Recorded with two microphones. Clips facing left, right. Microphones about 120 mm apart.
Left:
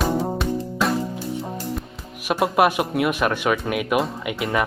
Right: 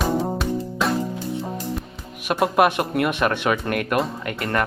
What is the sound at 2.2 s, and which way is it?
Speech, centre (ahead or behind).